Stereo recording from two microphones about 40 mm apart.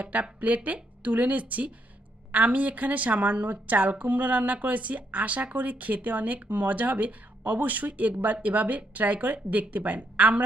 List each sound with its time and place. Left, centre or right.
0.0 s a woman's voice: right